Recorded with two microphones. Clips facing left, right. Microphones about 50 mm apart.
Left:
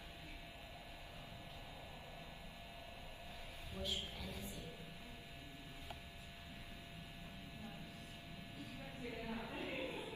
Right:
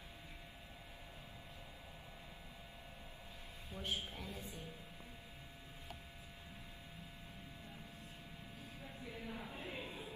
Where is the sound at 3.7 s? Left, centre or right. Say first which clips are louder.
Right 2 dB; right.